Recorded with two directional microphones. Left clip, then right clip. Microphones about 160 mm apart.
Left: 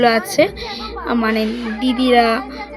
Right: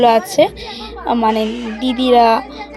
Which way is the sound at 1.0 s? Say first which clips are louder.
Right 4 dB; 10° right (ahead or behind).